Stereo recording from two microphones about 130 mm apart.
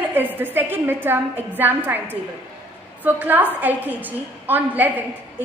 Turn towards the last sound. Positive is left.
turn(degrees=-15)  # may be behind; listen again after turning